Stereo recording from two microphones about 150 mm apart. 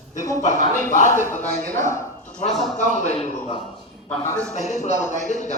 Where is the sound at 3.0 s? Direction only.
45° left (ahead or behind).